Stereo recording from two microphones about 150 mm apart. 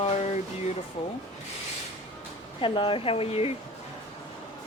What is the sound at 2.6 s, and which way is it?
Speech, 35° left (ahead or behind).